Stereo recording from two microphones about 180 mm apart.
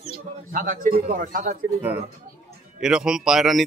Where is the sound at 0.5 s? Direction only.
50° right (ahead or behind).